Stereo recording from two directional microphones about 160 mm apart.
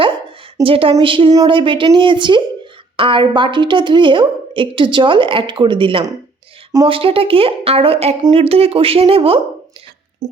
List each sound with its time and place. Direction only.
0.0 s a woman's voice: 30° right (ahead or behind)